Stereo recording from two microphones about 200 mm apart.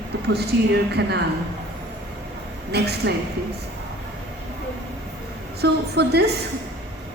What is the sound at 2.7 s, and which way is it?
Speech, 55° right (ahead or behind).